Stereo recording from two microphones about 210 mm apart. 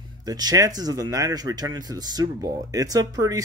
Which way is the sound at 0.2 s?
20° right (ahead or behind).